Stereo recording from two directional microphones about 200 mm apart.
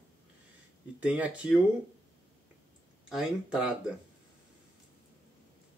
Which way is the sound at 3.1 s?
5° right (ahead or behind).